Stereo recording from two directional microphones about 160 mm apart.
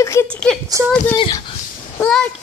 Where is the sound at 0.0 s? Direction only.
20° left (ahead or behind).